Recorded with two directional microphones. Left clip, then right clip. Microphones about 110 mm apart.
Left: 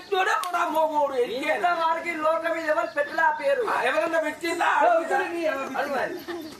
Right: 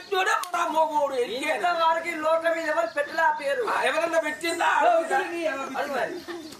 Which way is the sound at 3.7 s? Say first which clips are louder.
Left 1 dB; 20° right (ahead or behind).